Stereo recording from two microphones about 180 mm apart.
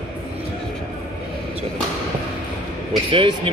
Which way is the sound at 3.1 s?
30° right (ahead or behind).